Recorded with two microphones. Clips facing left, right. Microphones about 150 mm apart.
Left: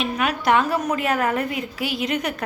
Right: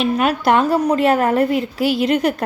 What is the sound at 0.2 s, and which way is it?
A woman's voice, 35° right (ahead or behind).